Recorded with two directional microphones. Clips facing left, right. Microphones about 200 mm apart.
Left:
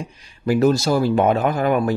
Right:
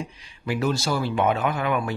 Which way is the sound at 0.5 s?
40° left (ahead or behind).